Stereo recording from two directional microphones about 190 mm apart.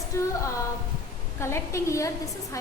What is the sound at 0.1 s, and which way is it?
Speech, 15° left (ahead or behind).